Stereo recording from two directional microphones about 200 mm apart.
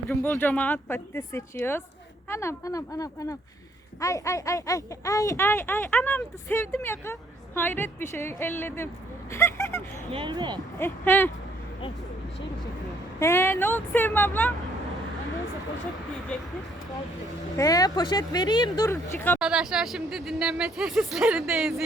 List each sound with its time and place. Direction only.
0.1 s speech: 10° left (ahead or behind)
10.1 s speech: 25° right (ahead or behind)
10.8 s speech: 10° left (ahead or behind)
13.1 s speech: 15° left (ahead or behind)
17.6 s speech: 20° left (ahead or behind)
19.4 s speech: 5° right (ahead or behind)